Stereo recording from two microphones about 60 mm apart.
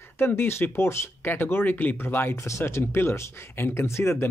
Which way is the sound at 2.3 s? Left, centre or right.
Left.